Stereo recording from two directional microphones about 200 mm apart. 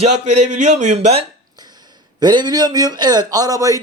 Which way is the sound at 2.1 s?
20° right (ahead or behind).